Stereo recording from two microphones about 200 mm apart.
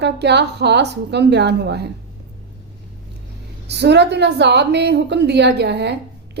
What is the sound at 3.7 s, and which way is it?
A woman's voice, 60° right (ahead or behind).